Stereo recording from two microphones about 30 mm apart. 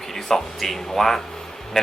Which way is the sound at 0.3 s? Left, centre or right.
Centre.